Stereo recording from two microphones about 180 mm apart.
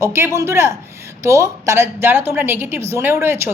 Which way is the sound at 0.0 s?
15° right (ahead or behind).